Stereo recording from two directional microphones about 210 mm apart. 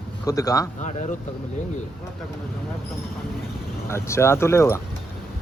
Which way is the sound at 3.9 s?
10° left (ahead or behind).